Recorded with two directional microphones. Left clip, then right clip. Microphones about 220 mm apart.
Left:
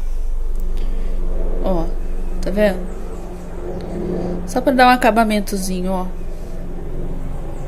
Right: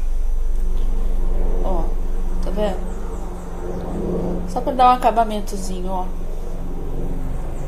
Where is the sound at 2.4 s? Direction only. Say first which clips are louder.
Left 6 dB; 35° left (ahead or behind).